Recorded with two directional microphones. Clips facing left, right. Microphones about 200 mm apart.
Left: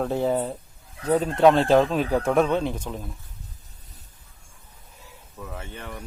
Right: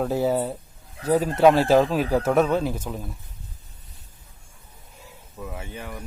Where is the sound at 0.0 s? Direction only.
5° right (ahead or behind).